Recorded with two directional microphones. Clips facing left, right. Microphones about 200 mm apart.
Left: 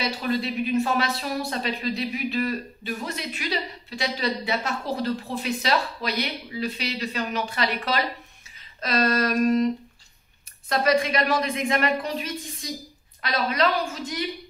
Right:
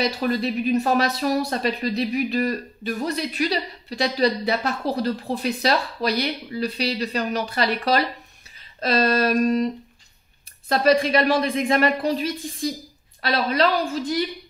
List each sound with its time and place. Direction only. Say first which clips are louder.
0.0 s speech: right 4 dB; 40° right (ahead or behind)
10.7 s speech: right 4 dB; 35° right (ahead or behind)